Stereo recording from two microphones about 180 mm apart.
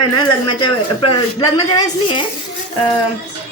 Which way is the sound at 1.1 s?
25° left (ahead or behind).